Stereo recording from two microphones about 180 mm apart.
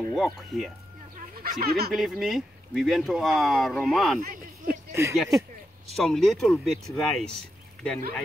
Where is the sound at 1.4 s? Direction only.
60° right (ahead or behind).